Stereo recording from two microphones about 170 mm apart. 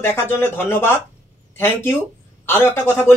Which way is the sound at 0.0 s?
15° left (ahead or behind).